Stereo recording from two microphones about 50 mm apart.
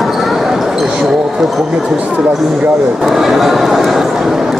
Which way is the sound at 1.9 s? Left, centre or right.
Right.